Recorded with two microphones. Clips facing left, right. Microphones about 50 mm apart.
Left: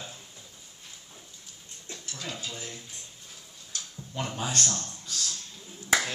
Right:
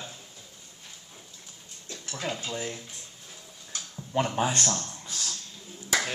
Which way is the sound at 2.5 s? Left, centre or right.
Right.